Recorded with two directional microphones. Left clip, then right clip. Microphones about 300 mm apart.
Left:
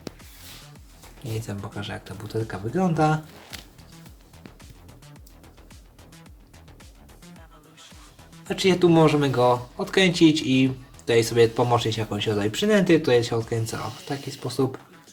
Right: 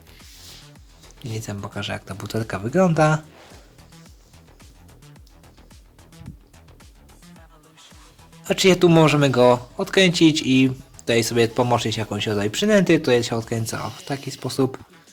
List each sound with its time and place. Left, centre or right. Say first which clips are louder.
1.4 s speech: right 5 dB; right
8.4 s speech: right 4 dB; right